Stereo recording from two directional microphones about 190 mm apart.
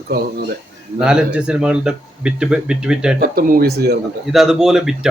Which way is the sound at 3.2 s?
50° right (ahead or behind).